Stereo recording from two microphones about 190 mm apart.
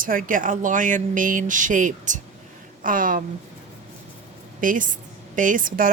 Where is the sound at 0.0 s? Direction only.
45° right (ahead or behind).